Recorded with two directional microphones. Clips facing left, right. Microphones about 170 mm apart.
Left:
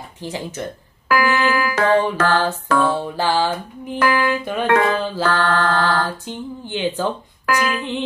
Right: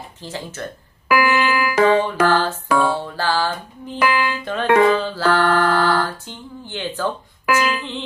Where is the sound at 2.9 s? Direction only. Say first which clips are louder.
Left 2 dB; 15° left (ahead or behind).